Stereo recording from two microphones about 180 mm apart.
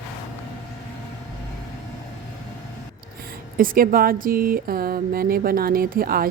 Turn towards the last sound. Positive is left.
turn(degrees=-55)  # may be behind; listen again after turning